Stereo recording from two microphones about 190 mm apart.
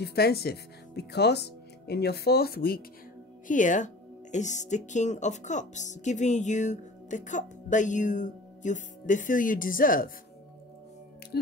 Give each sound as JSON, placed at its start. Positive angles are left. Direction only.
{"t": 0.0, "sound": "speech", "side_deg": 55}
{"t": 3.4, "sound": "speech", "side_deg": 40}